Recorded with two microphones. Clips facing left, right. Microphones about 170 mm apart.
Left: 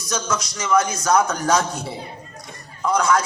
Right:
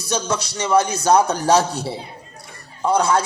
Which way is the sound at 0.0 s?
30° right (ahead or behind).